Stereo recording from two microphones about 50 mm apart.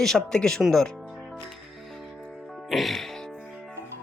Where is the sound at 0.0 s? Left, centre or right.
Centre.